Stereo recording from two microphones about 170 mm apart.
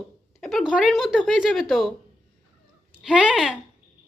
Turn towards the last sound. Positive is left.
turn(degrees=-5)  # may be behind; listen again after turning